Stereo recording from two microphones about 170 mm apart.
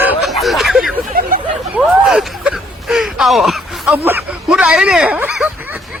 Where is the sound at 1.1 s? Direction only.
60° right (ahead or behind).